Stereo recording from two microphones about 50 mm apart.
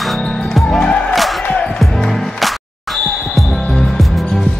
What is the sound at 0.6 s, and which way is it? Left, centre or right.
Music, centre.